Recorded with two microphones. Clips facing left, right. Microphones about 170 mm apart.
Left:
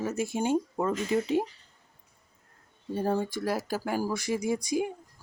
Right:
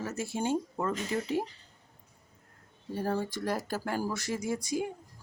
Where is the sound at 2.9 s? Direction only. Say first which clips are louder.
Left 3 dB; 20° left (ahead or behind).